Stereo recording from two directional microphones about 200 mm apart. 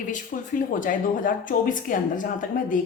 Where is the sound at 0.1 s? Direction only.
40° left (ahead or behind).